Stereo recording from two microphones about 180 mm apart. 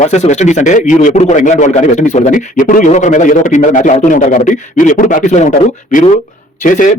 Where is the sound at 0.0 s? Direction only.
40° left (ahead or behind).